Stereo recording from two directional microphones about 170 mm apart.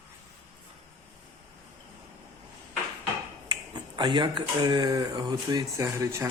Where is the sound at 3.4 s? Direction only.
25° right (ahead or behind).